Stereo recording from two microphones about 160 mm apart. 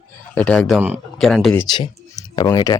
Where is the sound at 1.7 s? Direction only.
30° left (ahead or behind).